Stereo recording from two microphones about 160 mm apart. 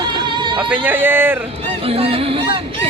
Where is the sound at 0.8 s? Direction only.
15° right (ahead or behind).